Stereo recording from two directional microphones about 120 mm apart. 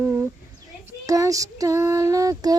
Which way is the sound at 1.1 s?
30° right (ahead or behind).